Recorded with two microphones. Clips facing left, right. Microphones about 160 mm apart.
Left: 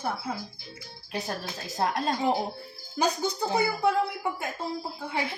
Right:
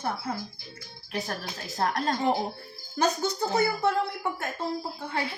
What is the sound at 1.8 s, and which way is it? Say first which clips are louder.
Speech: even; 15° left (ahead or behind).